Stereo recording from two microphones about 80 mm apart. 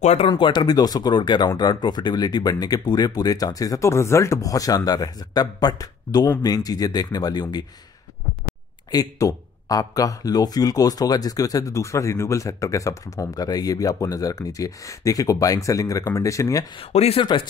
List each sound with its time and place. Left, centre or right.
0.4 s speech: left
8.9 s speech: left
16.7 s speech: left